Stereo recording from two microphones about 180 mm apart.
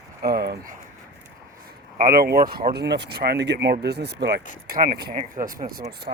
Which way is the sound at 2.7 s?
70° right (ahead or behind).